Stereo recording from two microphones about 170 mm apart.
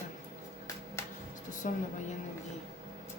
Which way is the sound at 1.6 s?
50° left (ahead or behind).